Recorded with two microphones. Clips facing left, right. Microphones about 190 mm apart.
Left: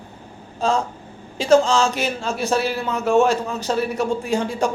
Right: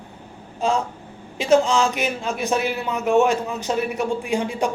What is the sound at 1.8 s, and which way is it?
Speech, 35° left (ahead or behind).